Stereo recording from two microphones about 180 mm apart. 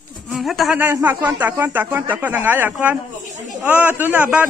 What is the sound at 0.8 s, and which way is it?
A man's voice, 10° right (ahead or behind).